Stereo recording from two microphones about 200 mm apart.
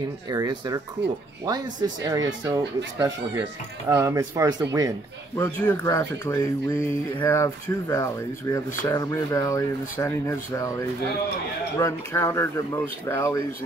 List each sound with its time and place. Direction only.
0.3 s speech: 20° right (ahead or behind)
1.0 s speech: 60° right (ahead or behind)
1.4 s speech: 20° right (ahead or behind)
5.4 s speech: 15° left (ahead or behind)
11.8 s speech: 15° left (ahead or behind)